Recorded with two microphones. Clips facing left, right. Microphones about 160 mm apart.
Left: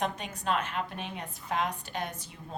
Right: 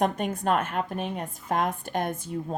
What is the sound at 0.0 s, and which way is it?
A woman's voice, 50° right (ahead or behind).